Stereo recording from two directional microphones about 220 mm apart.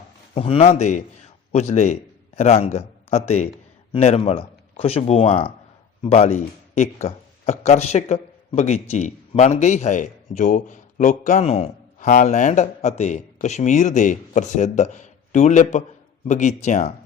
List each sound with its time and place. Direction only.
0.3 s speech: 25° left (ahead or behind)